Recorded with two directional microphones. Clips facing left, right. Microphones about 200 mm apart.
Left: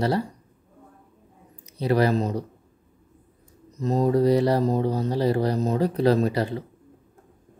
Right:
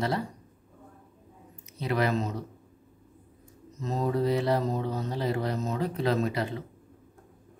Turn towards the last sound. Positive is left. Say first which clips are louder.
# left 6 dB
turn(degrees=35)  # may be behind; listen again after turning